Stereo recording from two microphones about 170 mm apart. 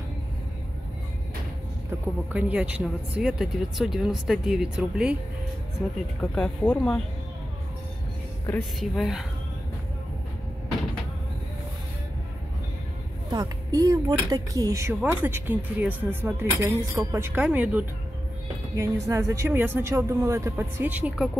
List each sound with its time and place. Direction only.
1.9 s speech: 10° right (ahead or behind)
6.2 s speech: 5° left (ahead or behind)
8.7 s speech: centre (ahead or behind)
13.3 s speech: 20° right (ahead or behind)